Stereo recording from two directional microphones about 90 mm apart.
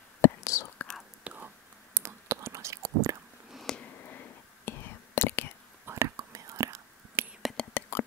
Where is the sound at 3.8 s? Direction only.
20° left (ahead or behind).